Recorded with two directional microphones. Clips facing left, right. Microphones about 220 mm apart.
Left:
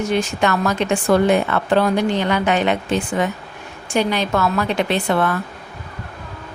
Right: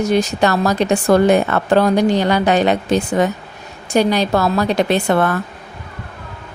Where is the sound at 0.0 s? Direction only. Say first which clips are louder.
Right 4 dB; 40° right (ahead or behind).